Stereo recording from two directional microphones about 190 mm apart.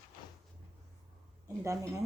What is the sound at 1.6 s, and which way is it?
Speech, 15° right (ahead or behind).